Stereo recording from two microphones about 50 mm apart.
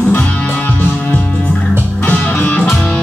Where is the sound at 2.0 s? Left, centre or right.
Left.